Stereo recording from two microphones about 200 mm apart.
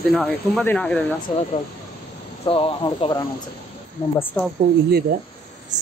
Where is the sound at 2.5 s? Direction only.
25° left (ahead or behind).